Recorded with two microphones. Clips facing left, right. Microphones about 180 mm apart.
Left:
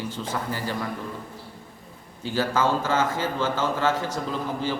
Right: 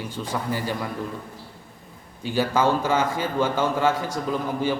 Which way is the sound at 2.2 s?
15° right (ahead or behind).